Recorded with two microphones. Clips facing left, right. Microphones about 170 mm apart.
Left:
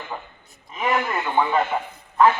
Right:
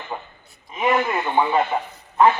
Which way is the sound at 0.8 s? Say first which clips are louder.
Right 3 dB; 20° right (ahead or behind).